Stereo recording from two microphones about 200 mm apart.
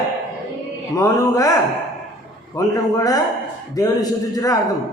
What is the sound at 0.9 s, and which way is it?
Speech, 15° left (ahead or behind).